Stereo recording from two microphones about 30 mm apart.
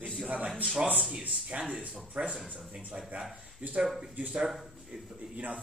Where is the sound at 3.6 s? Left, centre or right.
Right.